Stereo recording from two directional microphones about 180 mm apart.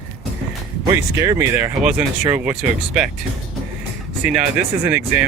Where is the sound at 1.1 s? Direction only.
15° right (ahead or behind).